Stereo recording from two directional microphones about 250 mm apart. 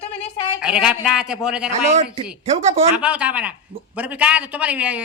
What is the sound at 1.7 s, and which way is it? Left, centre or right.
Speech, right.